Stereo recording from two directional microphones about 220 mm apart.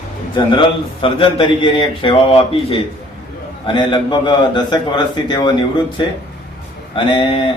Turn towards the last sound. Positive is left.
turn(degrees=20)  # may be behind; listen again after turning